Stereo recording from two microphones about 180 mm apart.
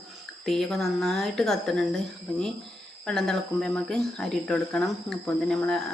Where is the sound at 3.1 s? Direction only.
Centre (ahead or behind).